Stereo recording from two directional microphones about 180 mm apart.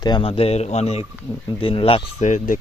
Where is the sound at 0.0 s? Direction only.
25° left (ahead or behind).